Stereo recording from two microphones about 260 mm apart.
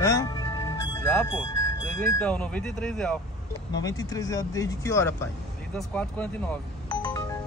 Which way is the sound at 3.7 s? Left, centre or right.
Centre.